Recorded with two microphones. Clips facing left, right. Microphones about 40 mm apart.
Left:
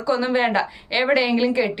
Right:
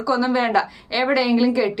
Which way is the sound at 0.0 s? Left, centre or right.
Left.